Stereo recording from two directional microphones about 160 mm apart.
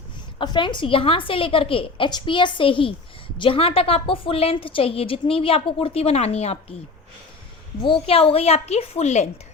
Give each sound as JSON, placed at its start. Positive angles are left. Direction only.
{"t": 0.3, "sound": "a woman's voice", "side_deg": 30}
{"t": 7.9, "sound": "a woman's voice", "side_deg": 35}